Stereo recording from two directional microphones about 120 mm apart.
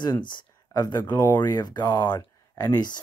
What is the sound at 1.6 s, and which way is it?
Speech, 35° left (ahead or behind).